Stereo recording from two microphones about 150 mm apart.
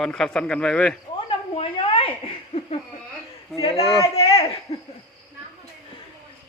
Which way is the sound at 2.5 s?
40° left (ahead or behind).